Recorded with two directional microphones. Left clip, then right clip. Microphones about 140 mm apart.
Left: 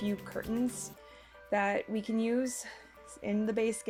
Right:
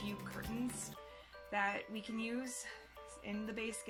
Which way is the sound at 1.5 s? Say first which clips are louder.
Left 7 dB; 50° left (ahead or behind).